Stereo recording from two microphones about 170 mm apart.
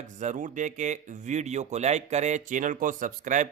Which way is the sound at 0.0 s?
45° right (ahead or behind).